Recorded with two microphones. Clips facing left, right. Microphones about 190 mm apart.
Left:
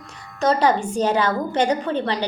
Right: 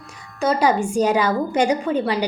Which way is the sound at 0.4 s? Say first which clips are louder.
Even; 10° right (ahead or behind).